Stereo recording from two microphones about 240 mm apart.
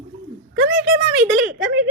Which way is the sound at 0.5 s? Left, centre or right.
Right.